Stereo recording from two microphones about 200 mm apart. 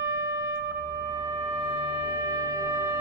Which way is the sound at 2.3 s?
15° right (ahead or behind).